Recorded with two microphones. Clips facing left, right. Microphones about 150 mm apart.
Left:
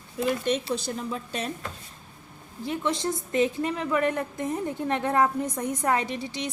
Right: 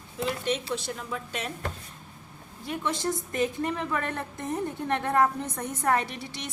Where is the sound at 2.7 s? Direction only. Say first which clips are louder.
Left 2 dB; 20° left (ahead or behind).